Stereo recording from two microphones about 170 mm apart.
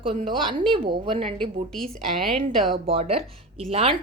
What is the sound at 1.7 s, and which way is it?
A woman's voice, 5° left (ahead or behind).